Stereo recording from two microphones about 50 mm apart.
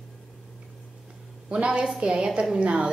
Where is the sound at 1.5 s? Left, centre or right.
Right.